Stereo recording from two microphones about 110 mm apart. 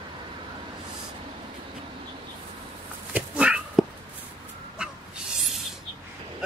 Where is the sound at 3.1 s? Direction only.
10° right (ahead or behind).